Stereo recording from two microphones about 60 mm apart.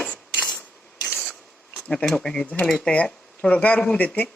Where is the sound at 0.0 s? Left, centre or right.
Left.